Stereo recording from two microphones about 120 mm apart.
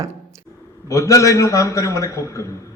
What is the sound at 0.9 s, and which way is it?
A man's voice, 25° left (ahead or behind).